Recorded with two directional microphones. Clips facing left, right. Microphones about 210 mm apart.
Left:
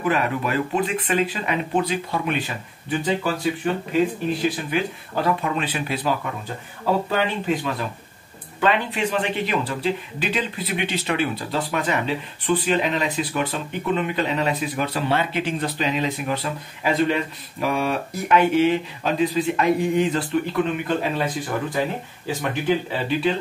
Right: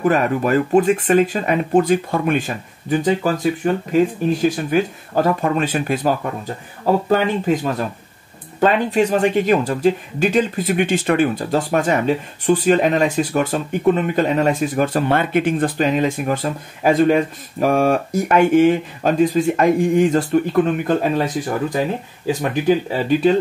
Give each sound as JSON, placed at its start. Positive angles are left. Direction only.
{"t": 0.0, "sound": "speech", "side_deg": -45}
{"t": 22.4, "sound": "speech", "side_deg": -45}